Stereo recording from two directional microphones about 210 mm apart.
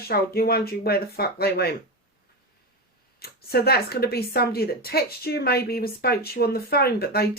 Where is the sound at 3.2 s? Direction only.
50° left (ahead or behind).